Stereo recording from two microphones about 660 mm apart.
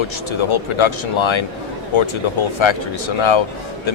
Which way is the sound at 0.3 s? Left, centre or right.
Left.